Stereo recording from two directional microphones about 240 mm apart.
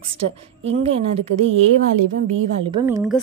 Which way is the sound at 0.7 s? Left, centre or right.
Right.